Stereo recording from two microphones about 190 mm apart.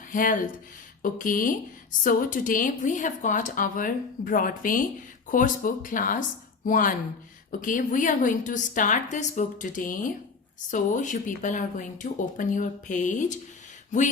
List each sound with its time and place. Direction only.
0.1 s speech: 45° left (ahead or behind)